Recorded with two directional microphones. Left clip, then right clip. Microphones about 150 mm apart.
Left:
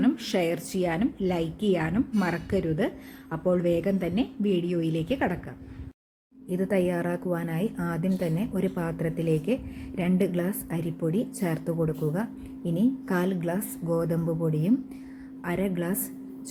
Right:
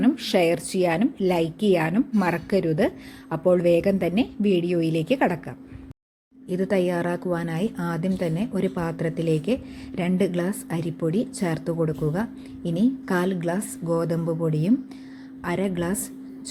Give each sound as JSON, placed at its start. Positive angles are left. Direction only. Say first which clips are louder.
{"t": 0.0, "sound": "a woman's voice", "louder": "right 5 dB", "side_deg": -25}
{"t": 6.5, "sound": "a woman's voice", "louder": "right 3 dB", "side_deg": -30}